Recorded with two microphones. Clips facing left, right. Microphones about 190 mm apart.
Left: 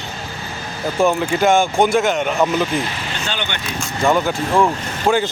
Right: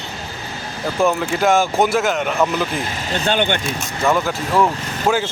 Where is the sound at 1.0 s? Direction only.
Centre (ahead or behind).